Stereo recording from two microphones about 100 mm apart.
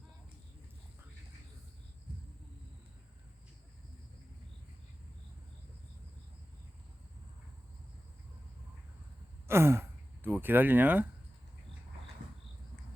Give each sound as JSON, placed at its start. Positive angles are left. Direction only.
{"t": 9.5, "sound": "speech", "side_deg": -25}